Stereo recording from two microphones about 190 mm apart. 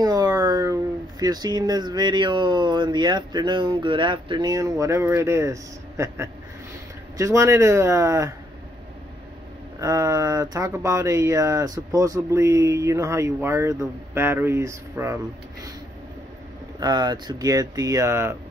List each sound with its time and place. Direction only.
0.0 s a sound: 20° right (ahead or behind)
1.2 s speech: 20° right (ahead or behind)
9.8 s speech: 15° right (ahead or behind)
16.8 s speech: 20° right (ahead or behind)